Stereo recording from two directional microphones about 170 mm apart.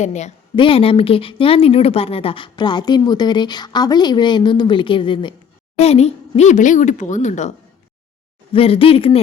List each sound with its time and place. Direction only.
0.0 s speech: 45° left (ahead or behind)
0.5 s speech: 30° left (ahead or behind)
8.5 s speech: 35° left (ahead or behind)